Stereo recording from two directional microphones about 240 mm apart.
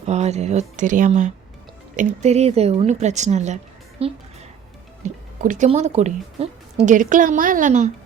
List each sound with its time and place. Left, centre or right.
0.0 s speech: right